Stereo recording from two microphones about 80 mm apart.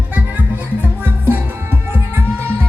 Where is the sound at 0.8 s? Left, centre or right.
Right.